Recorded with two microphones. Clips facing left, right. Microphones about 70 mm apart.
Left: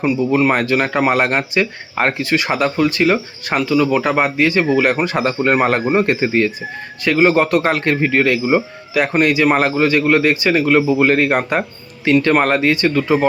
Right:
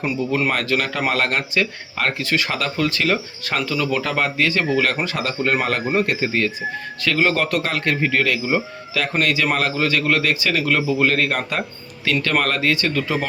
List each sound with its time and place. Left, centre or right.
0.2 s speech: left
9.0 s speech: left